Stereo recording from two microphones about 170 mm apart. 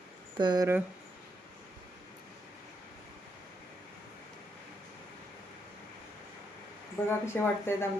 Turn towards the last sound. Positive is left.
turn(degrees=15)  # may be behind; listen again after turning